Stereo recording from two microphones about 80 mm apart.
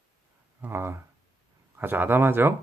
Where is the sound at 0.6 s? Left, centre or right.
Right.